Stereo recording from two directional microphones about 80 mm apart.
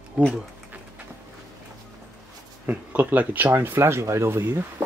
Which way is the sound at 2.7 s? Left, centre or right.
Right.